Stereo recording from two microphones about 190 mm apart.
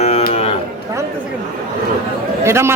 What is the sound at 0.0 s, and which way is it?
Cattle, 35° left (ahead or behind).